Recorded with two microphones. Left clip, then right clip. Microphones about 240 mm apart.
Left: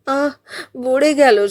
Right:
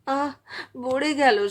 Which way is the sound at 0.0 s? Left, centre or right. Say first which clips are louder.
Left 7 dB; centre.